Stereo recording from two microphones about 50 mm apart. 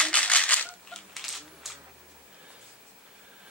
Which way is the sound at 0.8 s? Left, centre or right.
Centre.